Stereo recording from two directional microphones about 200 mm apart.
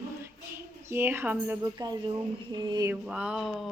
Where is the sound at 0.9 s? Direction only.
10° right (ahead or behind).